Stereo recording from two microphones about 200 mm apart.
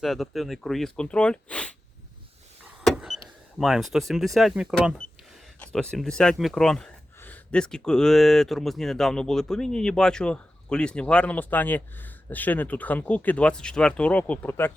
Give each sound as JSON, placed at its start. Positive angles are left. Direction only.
{"t": 0.0, "sound": "speech", "side_deg": 0}
{"t": 2.8, "sound": "power windows", "side_deg": 0}
{"t": 3.6, "sound": "speech", "side_deg": 0}